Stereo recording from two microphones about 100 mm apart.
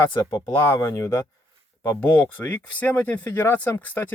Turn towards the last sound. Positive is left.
turn(degrees=20)  # may be behind; listen again after turning